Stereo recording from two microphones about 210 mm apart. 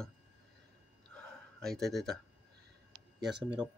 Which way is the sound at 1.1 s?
5° left (ahead or behind).